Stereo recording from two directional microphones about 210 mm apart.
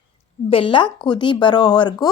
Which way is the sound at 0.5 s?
25° left (ahead or behind).